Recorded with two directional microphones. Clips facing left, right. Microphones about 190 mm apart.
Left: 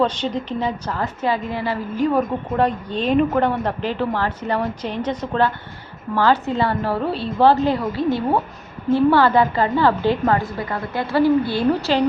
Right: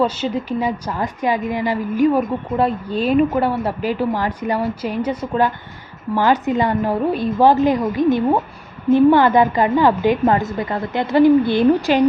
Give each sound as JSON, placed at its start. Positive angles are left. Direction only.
{"t": 0.0, "sound": "a woman's voice", "side_deg": -5}